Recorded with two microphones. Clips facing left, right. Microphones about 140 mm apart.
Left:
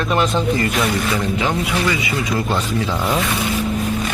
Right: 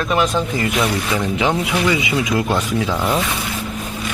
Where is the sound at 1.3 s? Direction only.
20° right (ahead or behind).